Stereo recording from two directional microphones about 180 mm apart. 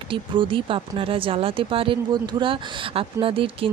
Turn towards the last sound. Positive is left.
turn(degrees=-30)  # may be behind; listen again after turning